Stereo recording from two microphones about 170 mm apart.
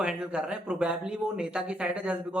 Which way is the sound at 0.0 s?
5° right (ahead or behind).